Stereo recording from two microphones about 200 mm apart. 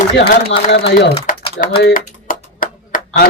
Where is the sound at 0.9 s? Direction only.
60° left (ahead or behind).